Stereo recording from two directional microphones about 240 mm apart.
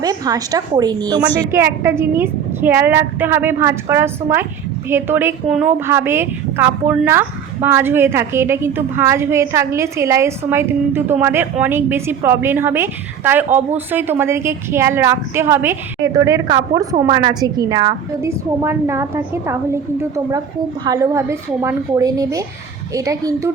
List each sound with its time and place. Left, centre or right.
0.0 s a woman's voice: centre